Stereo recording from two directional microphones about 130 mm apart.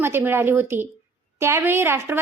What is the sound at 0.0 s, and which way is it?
A woman's voice, 15° right (ahead or behind).